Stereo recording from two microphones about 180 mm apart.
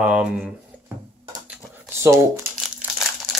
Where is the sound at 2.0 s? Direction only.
15° right (ahead or behind).